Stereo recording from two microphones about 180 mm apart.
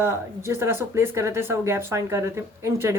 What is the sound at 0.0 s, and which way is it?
Speech, 15° right (ahead or behind).